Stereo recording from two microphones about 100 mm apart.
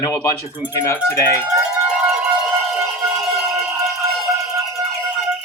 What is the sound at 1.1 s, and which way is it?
Speech, 30° left (ahead or behind).